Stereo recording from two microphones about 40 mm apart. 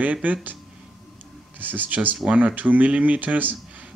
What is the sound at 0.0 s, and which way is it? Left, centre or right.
Speech, right.